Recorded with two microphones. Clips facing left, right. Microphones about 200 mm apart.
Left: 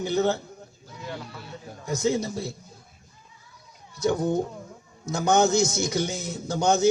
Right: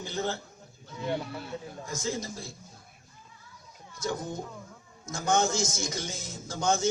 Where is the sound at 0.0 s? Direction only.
65° left (ahead or behind).